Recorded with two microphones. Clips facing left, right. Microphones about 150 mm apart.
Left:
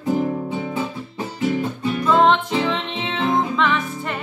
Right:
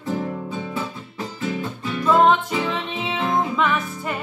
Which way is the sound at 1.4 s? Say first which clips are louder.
Left 6 dB; 25° left (ahead or behind).